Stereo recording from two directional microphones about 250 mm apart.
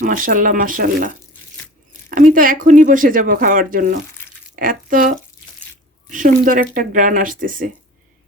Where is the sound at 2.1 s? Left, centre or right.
Right.